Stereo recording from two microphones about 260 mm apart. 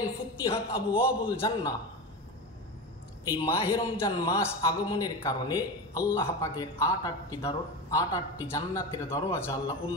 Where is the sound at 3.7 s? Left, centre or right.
Centre.